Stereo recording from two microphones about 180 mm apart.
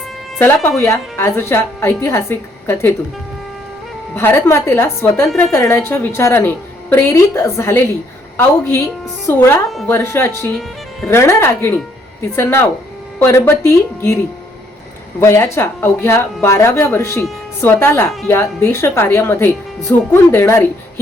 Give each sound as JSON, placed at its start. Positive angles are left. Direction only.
{"t": 0.3, "sound": "a woman's voice", "side_deg": 10}
{"t": 4.1, "sound": "a woman's voice", "side_deg": 10}
{"t": 9.6, "sound": "speech", "side_deg": 0}
{"t": 9.9, "sound": "a woman's voice", "side_deg": 15}
{"t": 15.2, "sound": "a woman's voice", "side_deg": 15}